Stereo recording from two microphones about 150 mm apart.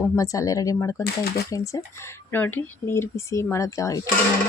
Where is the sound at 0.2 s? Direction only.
20° left (ahead or behind).